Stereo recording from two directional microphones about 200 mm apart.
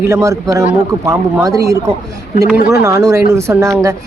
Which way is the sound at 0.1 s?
15° right (ahead or behind).